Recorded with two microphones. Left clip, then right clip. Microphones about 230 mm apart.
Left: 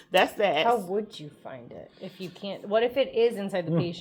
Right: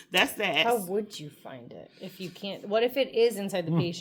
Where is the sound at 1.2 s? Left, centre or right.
Centre.